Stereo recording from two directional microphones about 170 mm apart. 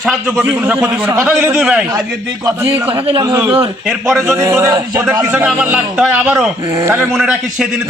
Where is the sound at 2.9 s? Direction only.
30° right (ahead or behind).